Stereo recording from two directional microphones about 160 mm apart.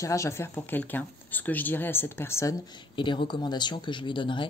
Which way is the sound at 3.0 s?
30° left (ahead or behind).